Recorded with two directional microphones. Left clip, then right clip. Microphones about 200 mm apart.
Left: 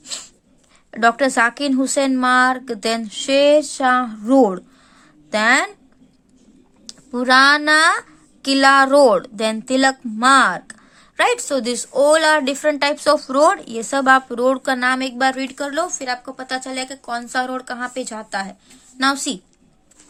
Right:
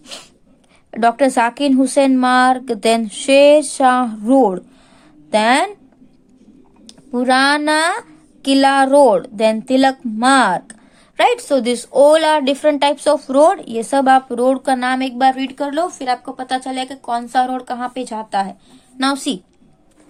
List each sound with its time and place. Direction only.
0.0 s dog: centre (ahead or behind)
0.9 s a woman's voice: 10° left (ahead or behind)
6.8 s a woman's voice: 10° left (ahead or behind)